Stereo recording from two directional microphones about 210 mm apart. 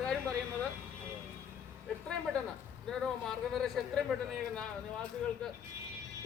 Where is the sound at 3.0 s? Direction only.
Centre (ahead or behind).